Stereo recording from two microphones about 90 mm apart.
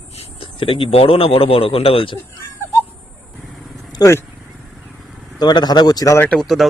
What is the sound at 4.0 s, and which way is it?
Speech, 45° left (ahead or behind).